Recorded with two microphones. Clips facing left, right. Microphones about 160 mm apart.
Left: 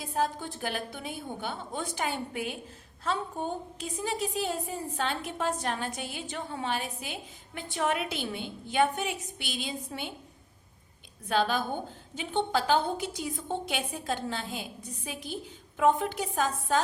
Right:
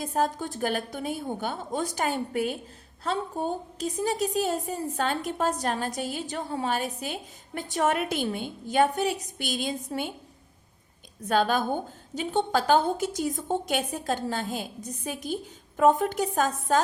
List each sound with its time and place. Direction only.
0.0 s a woman's voice: 45° right (ahead or behind)
11.3 s a woman's voice: 45° right (ahead or behind)